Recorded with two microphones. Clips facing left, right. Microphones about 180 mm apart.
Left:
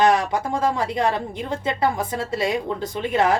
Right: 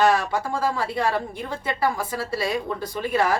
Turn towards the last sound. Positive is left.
turn(degrees=20)  # may be behind; listen again after turning